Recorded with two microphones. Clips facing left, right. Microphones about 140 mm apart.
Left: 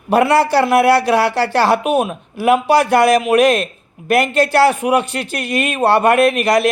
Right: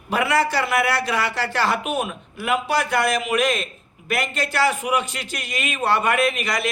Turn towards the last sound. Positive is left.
turn(degrees=70)  # may be behind; listen again after turning